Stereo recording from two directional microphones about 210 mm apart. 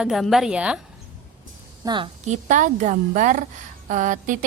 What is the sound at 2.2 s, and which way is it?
A woman's voice, 35° right (ahead or behind).